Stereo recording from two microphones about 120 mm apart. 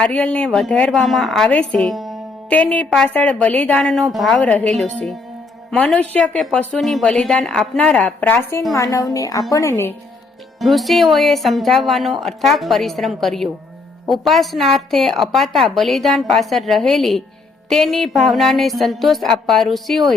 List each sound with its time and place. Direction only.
0.0 s a woman's voice: 10° left (ahead or behind)
2.5 s speech: 10° left (ahead or behind)
5.7 s speech: 10° left (ahead or behind)
8.7 s a woman's voice: 25° left (ahead or behind)
10.6 s a woman's voice: centre (ahead or behind)